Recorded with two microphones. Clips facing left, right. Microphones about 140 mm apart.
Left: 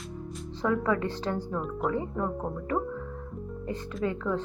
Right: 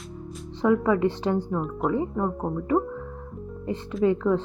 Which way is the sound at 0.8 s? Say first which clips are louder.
Right 6 dB; 20° right (ahead or behind).